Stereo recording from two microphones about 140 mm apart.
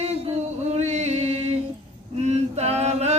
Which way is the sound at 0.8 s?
50° right (ahead or behind).